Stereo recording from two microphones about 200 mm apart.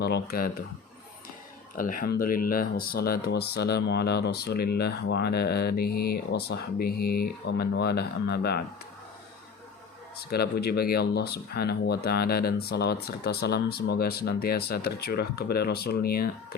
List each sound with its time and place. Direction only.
0.0 s speech: 50° left (ahead or behind)
1.7 s speech: 45° left (ahead or behind)
10.3 s speech: 50° left (ahead or behind)